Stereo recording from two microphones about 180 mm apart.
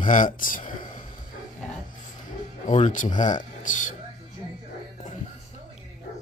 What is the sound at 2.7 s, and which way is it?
Speech, 40° left (ahead or behind).